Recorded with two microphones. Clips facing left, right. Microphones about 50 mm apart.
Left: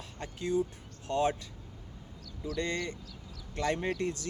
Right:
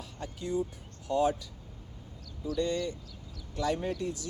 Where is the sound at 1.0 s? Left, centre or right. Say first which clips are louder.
Right 2 dB; left.